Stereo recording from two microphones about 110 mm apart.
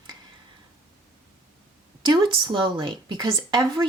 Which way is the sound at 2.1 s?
45° right (ahead or behind).